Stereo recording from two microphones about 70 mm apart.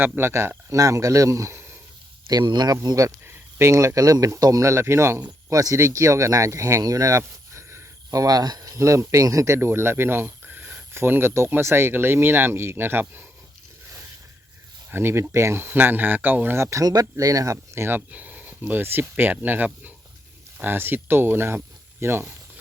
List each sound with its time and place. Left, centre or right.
0.2 s speech: right
0.7 s speech: right
2.3 s speech: right
3.2 s speech: right
4.6 s speech: right
5.5 s speech: right
8.1 s speech: right
10.9 s speech: right
14.8 s speech: right
16.6 s speech: right
16.9 s speech: right
17.8 s speech: right